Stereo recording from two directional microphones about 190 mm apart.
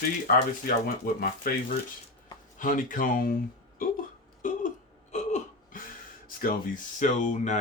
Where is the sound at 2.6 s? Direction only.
45° left (ahead or behind).